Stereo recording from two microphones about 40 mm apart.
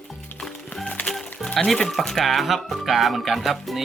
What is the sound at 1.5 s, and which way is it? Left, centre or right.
Speech, centre.